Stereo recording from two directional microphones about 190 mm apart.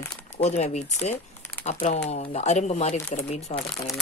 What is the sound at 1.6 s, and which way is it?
Speech, 45° left (ahead or behind).